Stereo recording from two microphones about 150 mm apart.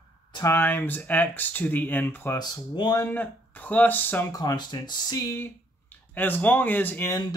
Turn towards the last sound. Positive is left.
turn(degrees=15)  # may be behind; listen again after turning